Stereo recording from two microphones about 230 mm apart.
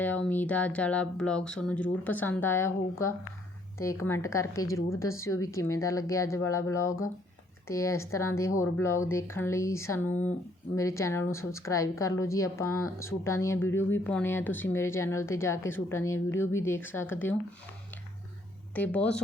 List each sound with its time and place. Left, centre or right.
0.0 s a woman's voice: centre
18.7 s a woman's voice: centre